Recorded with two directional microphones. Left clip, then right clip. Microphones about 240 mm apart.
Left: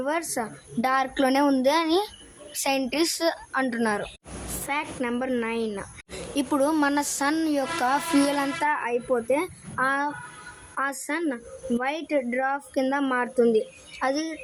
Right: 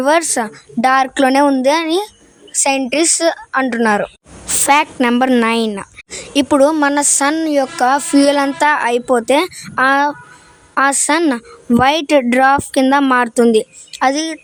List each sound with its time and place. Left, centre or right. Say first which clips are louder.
0.0 s a woman's voice: right 14 dB; right
4.6 s a woman's voice: right 17 dB; right